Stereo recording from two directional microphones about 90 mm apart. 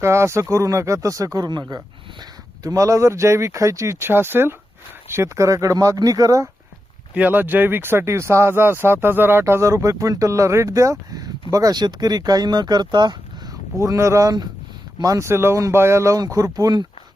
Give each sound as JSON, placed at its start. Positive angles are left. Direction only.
{"t": 0.0, "sound": "speech", "side_deg": -30}
{"t": 2.6, "sound": "speech", "side_deg": -35}
{"t": 7.1, "sound": "speech", "side_deg": -20}
{"t": 13.7, "sound": "speech", "side_deg": -40}
{"t": 15.3, "sound": "speech", "side_deg": -30}